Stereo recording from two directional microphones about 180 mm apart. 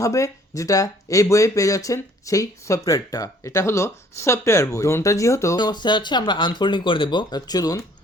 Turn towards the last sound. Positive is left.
turn(degrees=20)  # may be behind; listen again after turning